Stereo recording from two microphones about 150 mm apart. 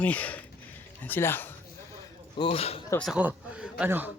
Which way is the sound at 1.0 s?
15° left (ahead or behind).